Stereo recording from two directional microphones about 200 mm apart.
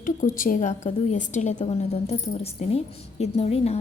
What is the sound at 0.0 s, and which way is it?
A woman's voice, 40° left (ahead or behind).